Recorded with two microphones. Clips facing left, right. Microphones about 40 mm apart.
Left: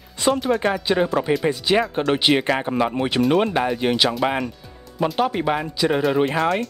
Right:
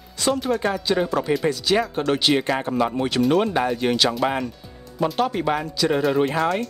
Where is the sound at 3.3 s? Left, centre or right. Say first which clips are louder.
Left 1 dB; centre.